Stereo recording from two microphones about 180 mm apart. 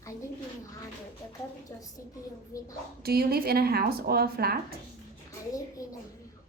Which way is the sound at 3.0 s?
60° right (ahead or behind).